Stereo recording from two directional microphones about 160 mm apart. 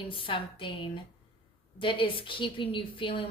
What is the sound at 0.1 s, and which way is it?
A woman's voice, 30° left (ahead or behind).